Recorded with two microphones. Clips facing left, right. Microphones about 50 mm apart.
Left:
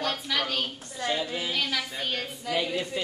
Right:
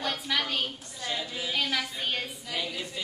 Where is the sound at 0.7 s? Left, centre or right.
Left.